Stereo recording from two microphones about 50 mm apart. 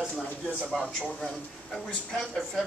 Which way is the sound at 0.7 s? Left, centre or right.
Left.